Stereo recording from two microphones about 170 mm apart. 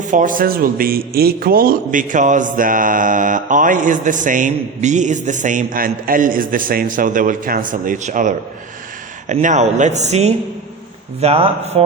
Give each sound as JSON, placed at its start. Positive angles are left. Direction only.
{"t": 0.0, "sound": "a man's voice", "side_deg": -50}